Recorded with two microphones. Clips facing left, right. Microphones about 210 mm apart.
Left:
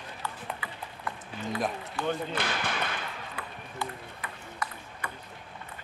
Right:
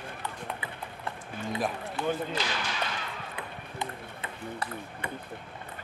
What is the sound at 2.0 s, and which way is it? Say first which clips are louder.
Speech: right 1 dB; 20° right (ahead or behind).